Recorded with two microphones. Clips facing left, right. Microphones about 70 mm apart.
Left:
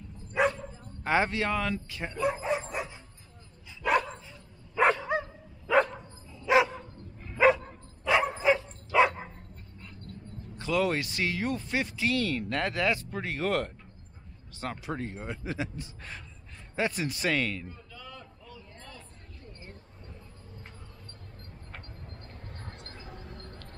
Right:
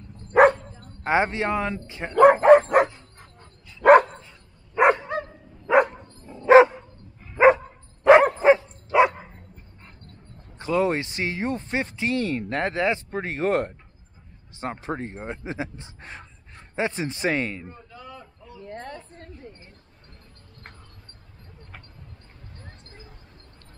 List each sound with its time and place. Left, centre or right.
0.3 s dog: right
1.0 s speech: right
2.1 s speech: right
3.8 s dog: right
4.7 s bow-wow: right
5.7 s dog: right
6.2 s dog: right
8.0 s dog: right
8.5 s dog: right
10.5 s speech: right
17.7 s a sound: right
18.6 s a sound: right
22.7 s a sound: left